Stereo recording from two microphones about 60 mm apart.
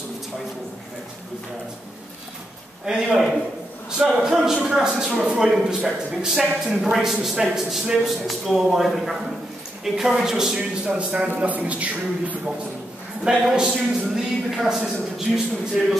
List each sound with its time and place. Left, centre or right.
2.8 s a man's voice: centre; by 12.5 s right
13.2 s a man's voice: centre